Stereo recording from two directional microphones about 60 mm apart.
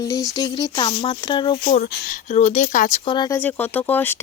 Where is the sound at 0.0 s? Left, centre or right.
Left.